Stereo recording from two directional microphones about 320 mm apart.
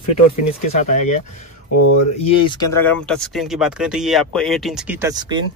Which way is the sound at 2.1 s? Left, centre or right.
Centre.